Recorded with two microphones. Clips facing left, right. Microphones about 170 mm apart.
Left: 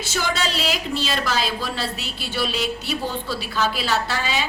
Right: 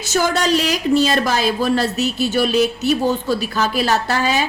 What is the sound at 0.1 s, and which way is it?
Speech, 45° right (ahead or behind).